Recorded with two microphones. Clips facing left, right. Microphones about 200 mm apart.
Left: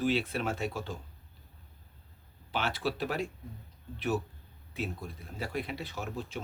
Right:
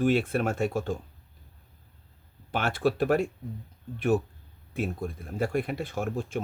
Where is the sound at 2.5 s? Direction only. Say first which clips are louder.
Right 6 dB; 50° right (ahead or behind).